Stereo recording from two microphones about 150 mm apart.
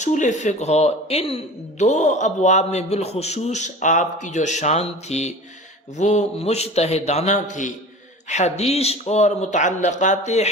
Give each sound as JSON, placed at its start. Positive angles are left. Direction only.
{"t": 0.0, "sound": "speech", "side_deg": 55}